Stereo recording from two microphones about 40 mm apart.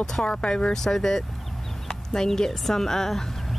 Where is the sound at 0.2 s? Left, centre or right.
Left.